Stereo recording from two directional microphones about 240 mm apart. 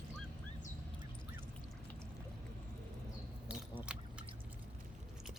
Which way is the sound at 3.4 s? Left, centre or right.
Centre.